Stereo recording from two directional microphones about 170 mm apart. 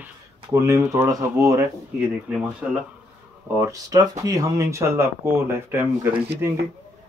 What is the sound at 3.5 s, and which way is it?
Speech, 20° right (ahead or behind).